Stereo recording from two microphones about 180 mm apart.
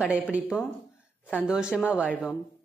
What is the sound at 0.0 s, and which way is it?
A woman's voice, 5° right (ahead or behind).